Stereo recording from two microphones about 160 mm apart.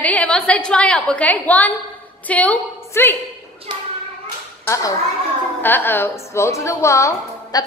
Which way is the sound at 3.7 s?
30° right (ahead or behind).